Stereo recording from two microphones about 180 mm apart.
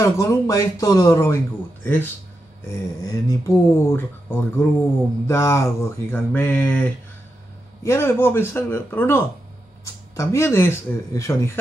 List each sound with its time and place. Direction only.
0.0 s speech: 15° left (ahead or behind)